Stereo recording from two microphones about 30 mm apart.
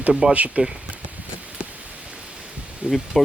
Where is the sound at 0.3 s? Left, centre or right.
Right.